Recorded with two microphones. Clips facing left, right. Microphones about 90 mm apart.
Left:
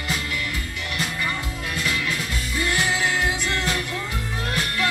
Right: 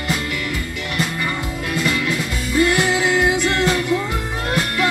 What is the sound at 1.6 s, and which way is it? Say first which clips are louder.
Music: right 6 dB; 60° right (ahead or behind).